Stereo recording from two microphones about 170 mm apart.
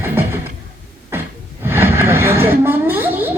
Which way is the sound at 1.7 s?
15° right (ahead or behind).